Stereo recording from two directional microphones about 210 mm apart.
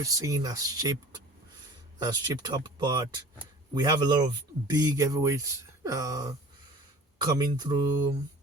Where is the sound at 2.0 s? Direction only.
20° right (ahead or behind).